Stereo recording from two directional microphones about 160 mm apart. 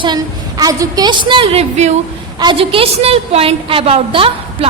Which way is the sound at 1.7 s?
45° right (ahead or behind).